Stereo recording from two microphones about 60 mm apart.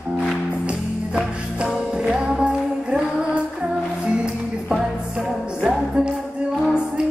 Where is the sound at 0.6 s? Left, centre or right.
Centre.